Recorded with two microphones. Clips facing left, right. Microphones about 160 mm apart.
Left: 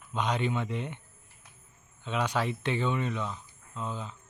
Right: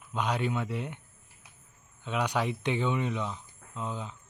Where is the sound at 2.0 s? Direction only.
10° right (ahead or behind).